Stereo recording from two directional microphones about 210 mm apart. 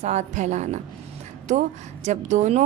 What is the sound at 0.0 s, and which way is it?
A woman's voice, 35° right (ahead or behind).